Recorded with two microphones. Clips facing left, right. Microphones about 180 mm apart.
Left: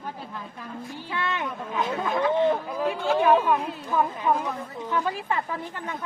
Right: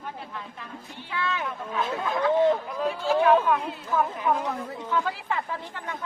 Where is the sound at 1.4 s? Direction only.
20° left (ahead or behind).